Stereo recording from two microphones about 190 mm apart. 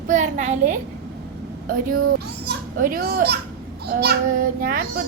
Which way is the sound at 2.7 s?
45° right (ahead or behind).